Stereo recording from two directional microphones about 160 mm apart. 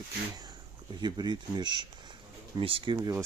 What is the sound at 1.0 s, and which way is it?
Speech, 25° right (ahead or behind).